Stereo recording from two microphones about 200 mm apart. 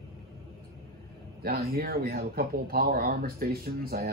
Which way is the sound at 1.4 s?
50° right (ahead or behind).